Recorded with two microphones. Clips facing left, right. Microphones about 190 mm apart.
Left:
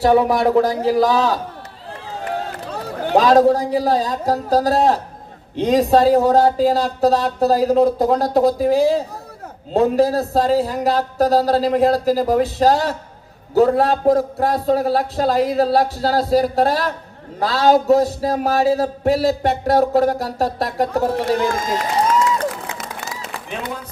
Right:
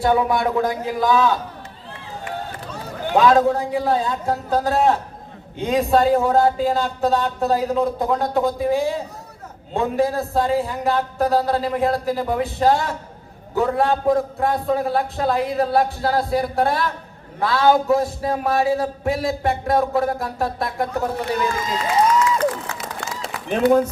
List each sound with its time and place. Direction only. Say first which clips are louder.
0.0 s a man's voice: left 4 dB; 40° left (ahead or behind)
3.0 s a man's voice: left 3 dB; 40° left (ahead or behind)
21.3 s speech: left 3 dB; 45° left (ahead or behind)
22.8 s a sound: even; centre (ahead or behind)
23.5 s speech: right 14 dB; 45° right (ahead or behind)